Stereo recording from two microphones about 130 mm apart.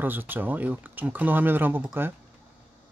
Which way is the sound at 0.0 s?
15° right (ahead or behind).